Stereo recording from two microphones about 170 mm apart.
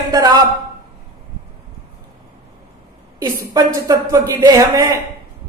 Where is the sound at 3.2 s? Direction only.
20° right (ahead or behind).